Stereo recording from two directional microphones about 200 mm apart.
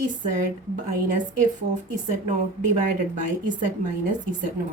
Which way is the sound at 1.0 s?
40° right (ahead or behind).